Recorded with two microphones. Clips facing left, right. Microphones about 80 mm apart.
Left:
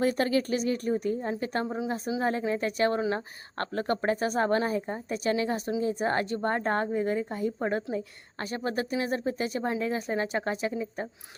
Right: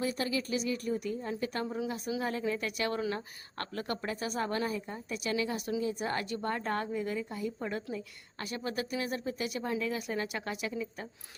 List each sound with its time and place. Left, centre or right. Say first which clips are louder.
0.0 s a woman's voice: left 7 dB; left